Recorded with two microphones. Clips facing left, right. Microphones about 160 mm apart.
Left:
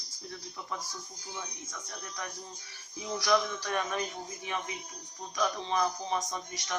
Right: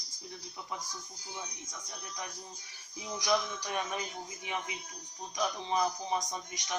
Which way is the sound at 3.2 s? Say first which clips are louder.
Left 3 dB; 15° right (ahead or behind).